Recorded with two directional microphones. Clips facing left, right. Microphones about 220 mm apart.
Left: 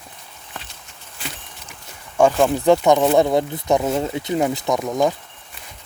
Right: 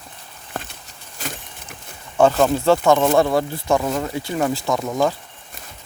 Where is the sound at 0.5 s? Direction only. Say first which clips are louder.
Right 7 dB; 50° right (ahead or behind).